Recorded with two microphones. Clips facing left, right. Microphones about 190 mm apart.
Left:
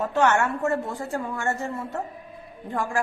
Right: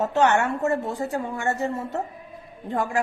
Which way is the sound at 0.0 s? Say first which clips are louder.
Right 1 dB; 20° right (ahead or behind).